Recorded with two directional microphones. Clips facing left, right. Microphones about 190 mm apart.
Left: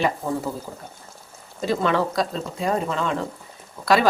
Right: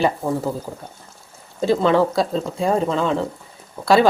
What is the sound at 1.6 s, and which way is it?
Speech, 30° right (ahead or behind).